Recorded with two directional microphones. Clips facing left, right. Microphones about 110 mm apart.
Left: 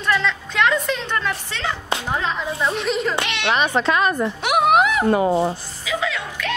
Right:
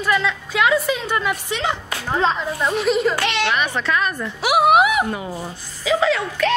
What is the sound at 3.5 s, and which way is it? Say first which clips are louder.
Speech: left 2 dB; 25° left (ahead or behind).